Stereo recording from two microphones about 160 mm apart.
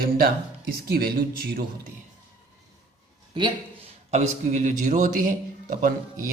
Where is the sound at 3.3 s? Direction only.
35° right (ahead or behind).